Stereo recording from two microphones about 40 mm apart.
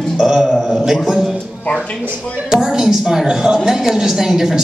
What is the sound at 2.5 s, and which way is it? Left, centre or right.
A woman's voice, centre.